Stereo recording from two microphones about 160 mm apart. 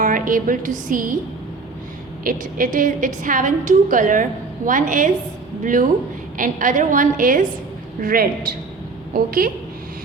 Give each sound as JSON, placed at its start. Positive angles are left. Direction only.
{"t": 0.0, "sound": "speech", "side_deg": -55}
{"t": 2.2, "sound": "a woman's voice", "side_deg": -60}
{"t": 6.3, "sound": "a woman's voice", "side_deg": -55}